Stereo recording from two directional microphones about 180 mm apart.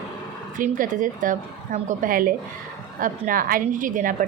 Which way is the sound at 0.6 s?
45° right (ahead or behind).